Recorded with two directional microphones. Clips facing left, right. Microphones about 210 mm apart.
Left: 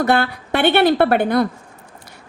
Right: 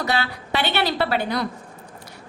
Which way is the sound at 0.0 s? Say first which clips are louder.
Left 7 dB; 55° left (ahead or behind).